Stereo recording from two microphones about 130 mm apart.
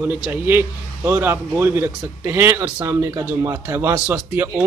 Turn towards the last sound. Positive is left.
turn(degrees=-15)  # may be behind; listen again after turning